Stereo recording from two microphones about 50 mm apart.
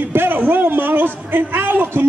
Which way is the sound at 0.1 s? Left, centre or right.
Right.